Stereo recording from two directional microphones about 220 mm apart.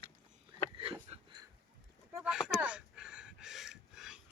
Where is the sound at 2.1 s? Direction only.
5° right (ahead or behind).